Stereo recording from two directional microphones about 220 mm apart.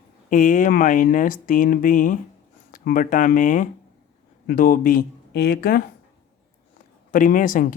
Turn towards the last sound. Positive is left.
turn(degrees=35)  # may be behind; listen again after turning